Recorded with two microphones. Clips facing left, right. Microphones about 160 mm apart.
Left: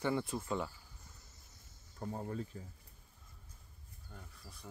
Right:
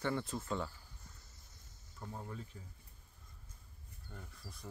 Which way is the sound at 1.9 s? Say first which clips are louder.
Left 6 dB; 35° left (ahead or behind).